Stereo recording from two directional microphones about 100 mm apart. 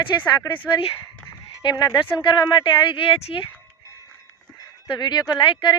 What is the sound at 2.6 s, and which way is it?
Speech, 65° left (ahead or behind).